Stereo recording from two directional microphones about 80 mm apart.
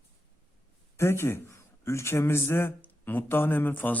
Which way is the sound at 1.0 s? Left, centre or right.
Left.